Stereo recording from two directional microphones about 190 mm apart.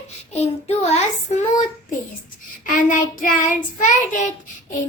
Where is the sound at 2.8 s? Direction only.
45° left (ahead or behind).